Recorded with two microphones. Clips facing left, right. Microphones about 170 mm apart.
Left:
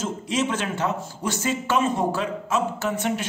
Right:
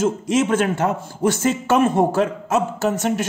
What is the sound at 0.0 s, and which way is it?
A man's voice, 45° right (ahead or behind).